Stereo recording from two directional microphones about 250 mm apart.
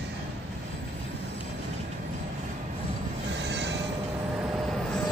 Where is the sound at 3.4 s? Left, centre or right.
Right.